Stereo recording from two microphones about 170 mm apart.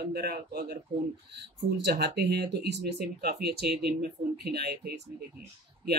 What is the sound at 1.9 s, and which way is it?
Speech, 75° right (ahead or behind).